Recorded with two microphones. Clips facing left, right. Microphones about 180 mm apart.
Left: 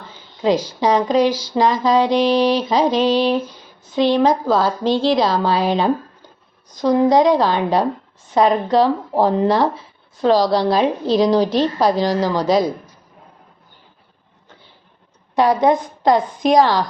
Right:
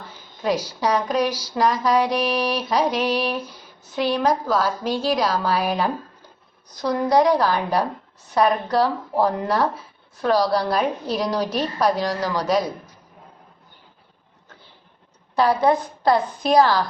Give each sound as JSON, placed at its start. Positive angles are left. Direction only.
{"t": 0.4, "sound": "a woman's voice", "side_deg": 25}
{"t": 15.4, "sound": "a woman's voice", "side_deg": 20}